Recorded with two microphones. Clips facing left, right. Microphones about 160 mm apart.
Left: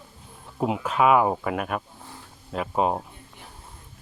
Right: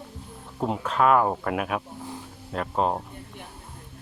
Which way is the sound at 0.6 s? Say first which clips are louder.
Left 1 dB; 5° left (ahead or behind).